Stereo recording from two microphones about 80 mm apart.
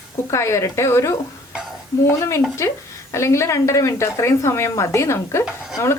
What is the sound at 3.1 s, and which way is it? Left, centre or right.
A woman's voice, left.